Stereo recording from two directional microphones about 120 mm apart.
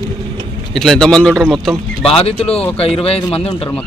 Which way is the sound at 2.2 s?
55° left (ahead or behind).